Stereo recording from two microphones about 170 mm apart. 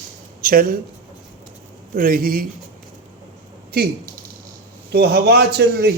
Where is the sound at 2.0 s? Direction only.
60° right (ahead or behind).